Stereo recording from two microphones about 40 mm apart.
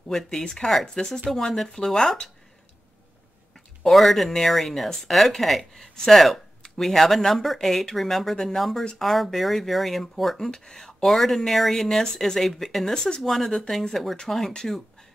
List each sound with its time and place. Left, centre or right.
0.3 s speech: centre
3.8 s speech: centre
5.6 s speech: centre
10.5 s speech: centre
12.9 s speech: centre
13.2 s speech: centre